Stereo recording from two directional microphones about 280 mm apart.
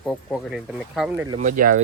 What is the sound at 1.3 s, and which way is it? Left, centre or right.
Speech, right.